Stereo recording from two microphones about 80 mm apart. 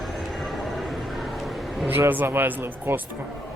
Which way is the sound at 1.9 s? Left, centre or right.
Right.